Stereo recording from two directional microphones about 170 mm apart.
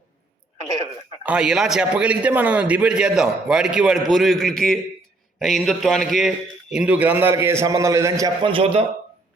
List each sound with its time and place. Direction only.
1.2 s a man's voice: 5° right (ahead or behind)
8.4 s a man's voice: 30° right (ahead or behind)